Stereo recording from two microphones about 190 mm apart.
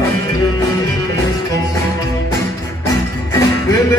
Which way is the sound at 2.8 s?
15° left (ahead or behind).